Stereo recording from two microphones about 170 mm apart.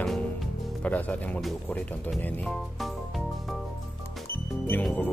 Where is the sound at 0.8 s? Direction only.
10° left (ahead or behind).